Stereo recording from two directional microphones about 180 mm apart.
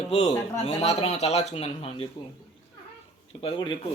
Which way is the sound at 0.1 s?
35° left (ahead or behind).